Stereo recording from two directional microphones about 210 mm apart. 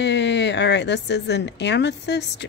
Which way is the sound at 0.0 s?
55° left (ahead or behind).